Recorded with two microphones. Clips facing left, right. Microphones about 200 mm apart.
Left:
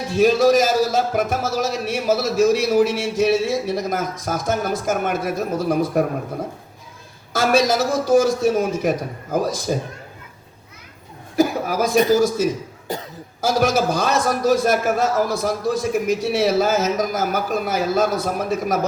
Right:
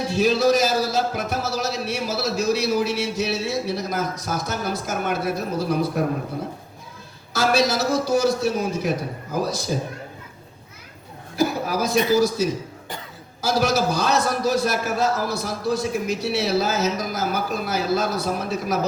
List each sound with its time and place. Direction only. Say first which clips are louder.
0.1 s a man's voice: left 4 dB; 50° left (ahead or behind)
7.3 s a man's voice: left 3 dB; 50° left (ahead or behind)
11.3 s a man's voice: left 3 dB; 50° left (ahead or behind)